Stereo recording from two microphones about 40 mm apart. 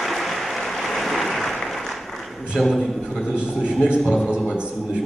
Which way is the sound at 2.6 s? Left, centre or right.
Centre.